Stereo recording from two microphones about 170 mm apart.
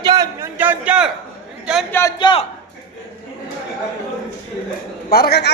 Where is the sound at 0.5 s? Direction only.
10° right (ahead or behind).